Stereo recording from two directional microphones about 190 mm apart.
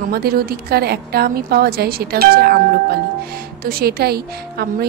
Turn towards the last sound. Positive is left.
turn(degrees=-55)  # may be behind; listen again after turning